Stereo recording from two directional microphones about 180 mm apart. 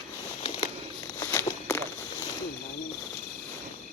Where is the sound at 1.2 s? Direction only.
15° left (ahead or behind).